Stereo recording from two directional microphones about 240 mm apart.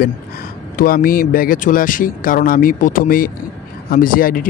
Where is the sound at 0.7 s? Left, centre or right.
Left.